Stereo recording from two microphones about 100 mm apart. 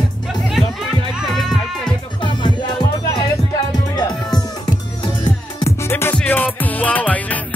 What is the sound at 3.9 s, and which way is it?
Music, 45° left (ahead or behind).